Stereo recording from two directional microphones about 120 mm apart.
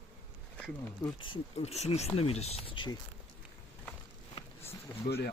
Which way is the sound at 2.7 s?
40° left (ahead or behind).